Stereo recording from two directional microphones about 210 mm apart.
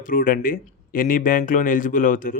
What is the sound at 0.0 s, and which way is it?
Speech, 40° left (ahead or behind).